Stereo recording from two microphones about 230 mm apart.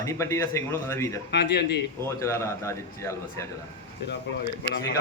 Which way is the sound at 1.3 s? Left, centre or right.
Left.